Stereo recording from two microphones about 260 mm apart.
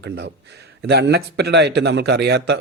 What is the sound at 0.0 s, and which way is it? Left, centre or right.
A man's voice, right.